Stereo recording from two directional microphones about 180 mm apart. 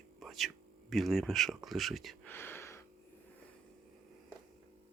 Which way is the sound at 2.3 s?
15° left (ahead or behind).